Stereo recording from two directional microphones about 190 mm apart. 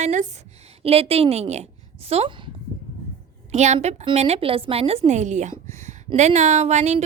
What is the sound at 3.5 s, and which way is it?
A woman's voice, 35° right (ahead or behind).